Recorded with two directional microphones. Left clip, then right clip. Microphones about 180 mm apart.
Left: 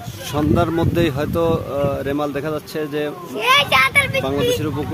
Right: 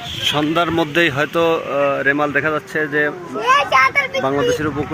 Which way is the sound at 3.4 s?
25° right (ahead or behind).